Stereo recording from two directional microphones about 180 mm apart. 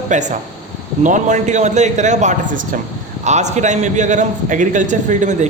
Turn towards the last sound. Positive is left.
turn(degrees=-40)  # may be behind; listen again after turning